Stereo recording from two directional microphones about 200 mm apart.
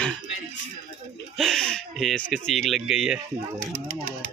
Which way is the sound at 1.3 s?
Centre (ahead or behind).